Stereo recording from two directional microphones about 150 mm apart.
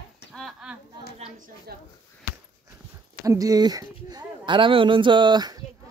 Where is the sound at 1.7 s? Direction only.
90° right.